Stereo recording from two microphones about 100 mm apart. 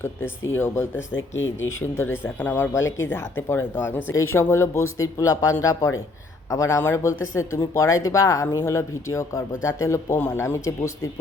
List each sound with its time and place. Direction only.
0.0 s speech: 25° left (ahead or behind)